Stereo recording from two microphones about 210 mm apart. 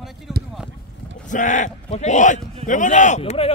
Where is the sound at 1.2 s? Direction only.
35° left (ahead or behind).